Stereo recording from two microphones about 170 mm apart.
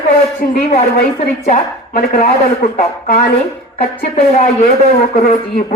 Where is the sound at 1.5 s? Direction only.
50° left (ahead or behind).